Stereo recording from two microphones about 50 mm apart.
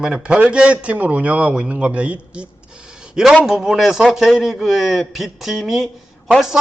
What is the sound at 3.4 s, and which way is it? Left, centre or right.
A man's voice, centre.